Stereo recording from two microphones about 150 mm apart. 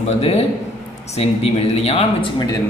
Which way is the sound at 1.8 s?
40° left (ahead or behind).